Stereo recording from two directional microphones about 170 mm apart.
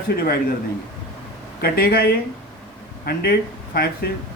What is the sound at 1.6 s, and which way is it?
A man's voice, 60° left (ahead or behind).